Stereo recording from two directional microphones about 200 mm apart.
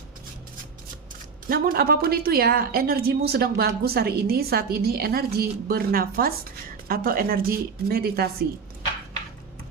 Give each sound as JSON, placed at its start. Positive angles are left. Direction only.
{"t": 1.5, "sound": "a woman's voice", "side_deg": -45}